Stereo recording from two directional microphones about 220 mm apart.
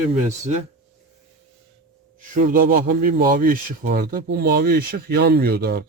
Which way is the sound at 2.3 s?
40° right (ahead or behind).